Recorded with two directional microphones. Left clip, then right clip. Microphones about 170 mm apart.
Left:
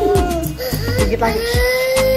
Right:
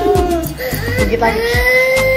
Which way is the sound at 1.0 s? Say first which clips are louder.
Right 4 dB; 25° left (ahead or behind).